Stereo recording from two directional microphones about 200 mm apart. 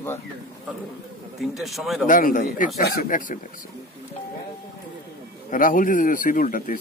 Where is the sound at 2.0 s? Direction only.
40° left (ahead or behind).